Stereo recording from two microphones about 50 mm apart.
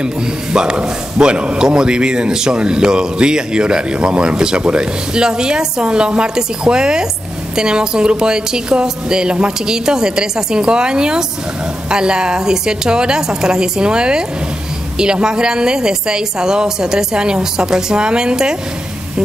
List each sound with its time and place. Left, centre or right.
0.0 s a man's voice: centre